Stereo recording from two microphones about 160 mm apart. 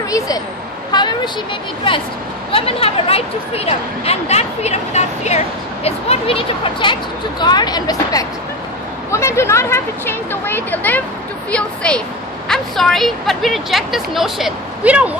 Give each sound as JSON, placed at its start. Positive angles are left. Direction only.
{"t": 0.9, "sound": "speech", "side_deg": 30}
{"t": 2.5, "sound": "a woman's voice", "side_deg": 35}